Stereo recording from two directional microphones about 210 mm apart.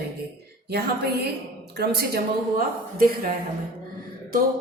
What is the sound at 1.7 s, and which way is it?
A woman's voice, 50° right (ahead or behind).